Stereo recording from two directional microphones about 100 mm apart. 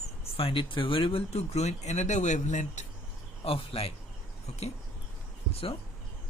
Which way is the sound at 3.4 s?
65° left (ahead or behind).